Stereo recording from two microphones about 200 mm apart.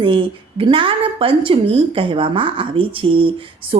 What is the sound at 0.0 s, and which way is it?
A woman's voice, 25° right (ahead or behind).